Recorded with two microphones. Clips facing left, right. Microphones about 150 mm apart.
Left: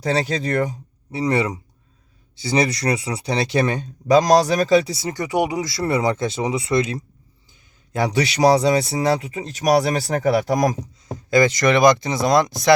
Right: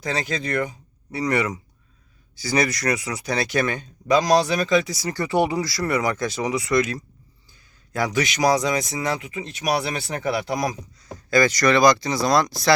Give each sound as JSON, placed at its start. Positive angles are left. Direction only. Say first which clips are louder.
{"t": 0.0, "sound": "a man's voice", "louder": "left 5 dB", "side_deg": 35}
{"t": 11.0, "sound": "speech", "louder": "left 3 dB", "side_deg": 20}